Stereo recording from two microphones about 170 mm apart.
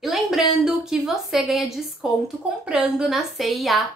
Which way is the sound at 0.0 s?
Centre (ahead or behind).